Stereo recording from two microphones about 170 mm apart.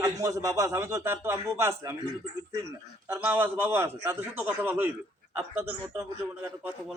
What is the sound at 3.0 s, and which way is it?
A man's voice, 10° right (ahead or behind).